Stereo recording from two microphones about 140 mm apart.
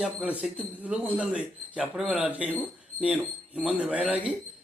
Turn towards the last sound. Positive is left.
turn(degrees=-5)  # may be behind; listen again after turning